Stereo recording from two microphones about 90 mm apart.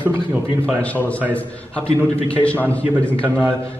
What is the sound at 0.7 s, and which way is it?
A man's voice, 15° left (ahead or behind).